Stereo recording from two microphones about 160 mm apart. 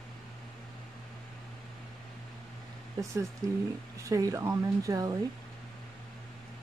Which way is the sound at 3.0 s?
20° right (ahead or behind).